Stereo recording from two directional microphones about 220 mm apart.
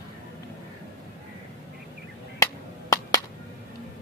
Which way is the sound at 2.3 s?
15° left (ahead or behind).